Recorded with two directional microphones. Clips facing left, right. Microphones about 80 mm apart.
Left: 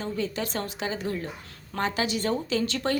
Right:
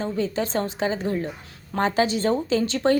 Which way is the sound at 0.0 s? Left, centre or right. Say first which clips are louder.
Right 5 dB; right.